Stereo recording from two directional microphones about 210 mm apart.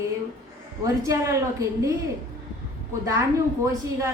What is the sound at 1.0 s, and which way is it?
Speech, 15° right (ahead or behind).